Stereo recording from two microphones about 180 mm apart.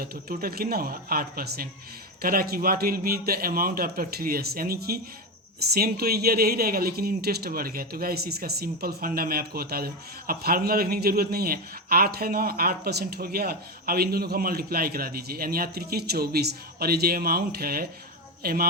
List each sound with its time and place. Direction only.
0.0 s speech: 55° right (ahead or behind)